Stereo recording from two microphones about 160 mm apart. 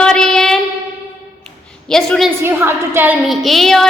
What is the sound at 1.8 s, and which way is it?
Speech, 5° left (ahead or behind).